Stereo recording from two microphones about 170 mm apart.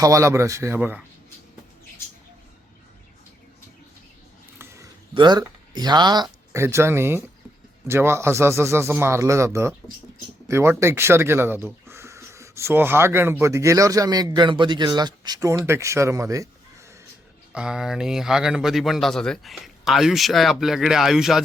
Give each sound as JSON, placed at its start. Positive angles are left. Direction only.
{"t": 0.0, "sound": "speech", "side_deg": -20}
{"t": 4.5, "sound": "a sound", "side_deg": -15}
{"t": 5.1, "sound": "speech", "side_deg": -25}
{"t": 17.5, "sound": "speech", "side_deg": -5}